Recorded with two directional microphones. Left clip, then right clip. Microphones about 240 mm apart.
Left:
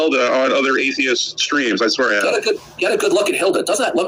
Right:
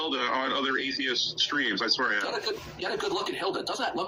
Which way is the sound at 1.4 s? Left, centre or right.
Left.